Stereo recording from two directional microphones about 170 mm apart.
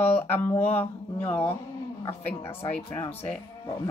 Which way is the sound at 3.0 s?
35° left (ahead or behind).